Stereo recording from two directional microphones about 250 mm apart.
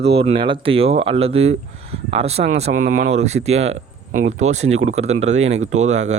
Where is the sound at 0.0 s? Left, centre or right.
Right.